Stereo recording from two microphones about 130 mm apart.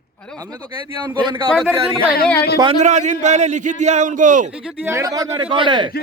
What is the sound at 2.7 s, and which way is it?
A man's voice, 65° right (ahead or behind).